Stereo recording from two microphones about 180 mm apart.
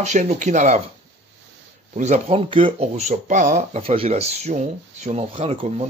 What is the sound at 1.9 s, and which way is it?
Speech, 40° right (ahead or behind).